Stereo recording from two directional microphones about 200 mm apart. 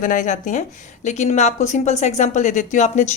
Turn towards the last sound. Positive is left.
turn(degrees=35)  # may be behind; listen again after turning